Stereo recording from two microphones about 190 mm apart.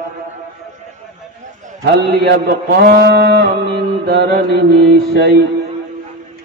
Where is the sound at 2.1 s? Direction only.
60° right (ahead or behind).